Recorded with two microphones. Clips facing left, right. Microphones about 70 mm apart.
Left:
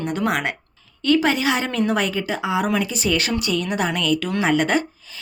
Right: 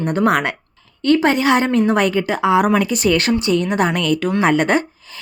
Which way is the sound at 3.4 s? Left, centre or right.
Right.